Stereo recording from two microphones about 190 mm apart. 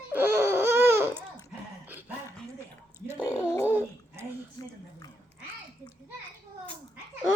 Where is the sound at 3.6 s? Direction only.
10° right (ahead or behind).